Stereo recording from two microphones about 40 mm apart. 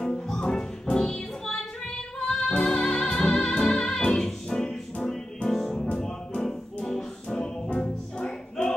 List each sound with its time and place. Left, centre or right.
0.0 s music: centre